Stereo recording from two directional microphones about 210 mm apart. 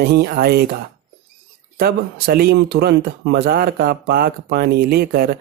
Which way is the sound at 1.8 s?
50° right (ahead or behind).